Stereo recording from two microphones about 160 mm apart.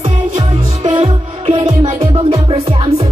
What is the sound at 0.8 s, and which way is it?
Music, 40° right (ahead or behind).